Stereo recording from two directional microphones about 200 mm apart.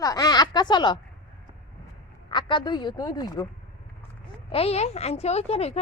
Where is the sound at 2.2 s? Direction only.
25° left (ahead or behind).